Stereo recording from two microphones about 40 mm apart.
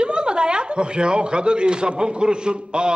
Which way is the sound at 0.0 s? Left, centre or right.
Right.